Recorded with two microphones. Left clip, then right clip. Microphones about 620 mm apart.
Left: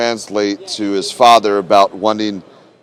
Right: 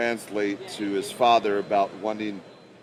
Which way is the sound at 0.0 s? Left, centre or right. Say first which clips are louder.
Left 10 dB; left.